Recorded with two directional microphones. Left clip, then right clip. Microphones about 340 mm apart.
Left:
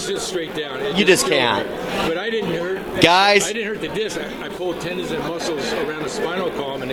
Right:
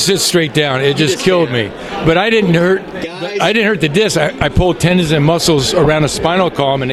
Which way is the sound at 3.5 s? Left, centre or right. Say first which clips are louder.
Right 11 dB; right.